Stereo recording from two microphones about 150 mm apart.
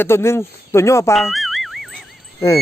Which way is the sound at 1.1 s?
Centre (ahead or behind).